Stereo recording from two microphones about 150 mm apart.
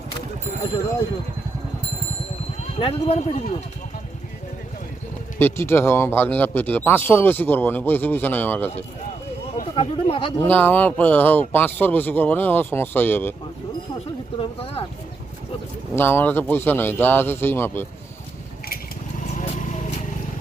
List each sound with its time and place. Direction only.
2.7 s speech: 40° left (ahead or behind)
5.4 s speech: 15° left (ahead or behind)
9.7 s speech: 35° left (ahead or behind)
10.4 s speech: 10° left (ahead or behind)
14.3 s speech: 35° left (ahead or behind)
16.0 s speech: 15° left (ahead or behind)
19.4 s vehicle: 55° left (ahead or behind)